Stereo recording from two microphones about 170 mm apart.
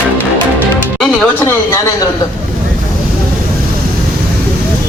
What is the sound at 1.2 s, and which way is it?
Speech, 15° left (ahead or behind).